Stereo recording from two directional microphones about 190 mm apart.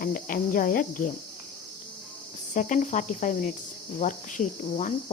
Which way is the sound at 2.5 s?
40° left (ahead or behind).